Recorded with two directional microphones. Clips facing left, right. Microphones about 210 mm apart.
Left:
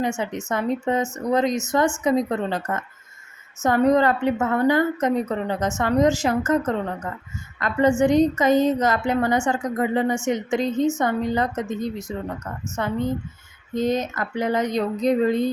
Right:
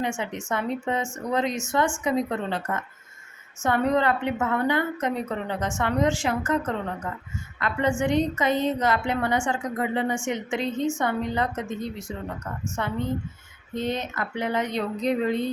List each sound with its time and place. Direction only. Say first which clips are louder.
0.2 s a woman's voice: left 3 dB; 40° left (ahead or behind)